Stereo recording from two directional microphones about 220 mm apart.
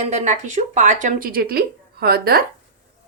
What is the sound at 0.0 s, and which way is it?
Speech, 30° right (ahead or behind).